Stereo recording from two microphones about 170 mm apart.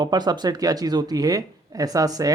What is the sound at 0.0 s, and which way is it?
Speech, 25° right (ahead or behind).